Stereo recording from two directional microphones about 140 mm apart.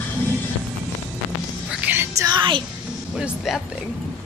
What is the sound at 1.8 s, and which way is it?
Music, 15° right (ahead or behind).